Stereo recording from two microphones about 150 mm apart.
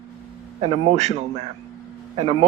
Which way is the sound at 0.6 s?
40° right (ahead or behind).